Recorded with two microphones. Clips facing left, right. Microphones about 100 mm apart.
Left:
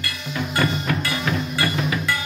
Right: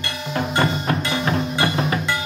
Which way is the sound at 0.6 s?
30° right (ahead or behind).